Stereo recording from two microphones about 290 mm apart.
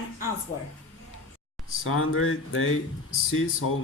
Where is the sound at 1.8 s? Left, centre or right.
Left.